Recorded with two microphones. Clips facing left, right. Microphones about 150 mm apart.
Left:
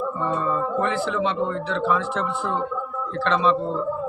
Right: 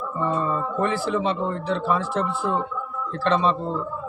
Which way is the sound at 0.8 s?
40° right (ahead or behind).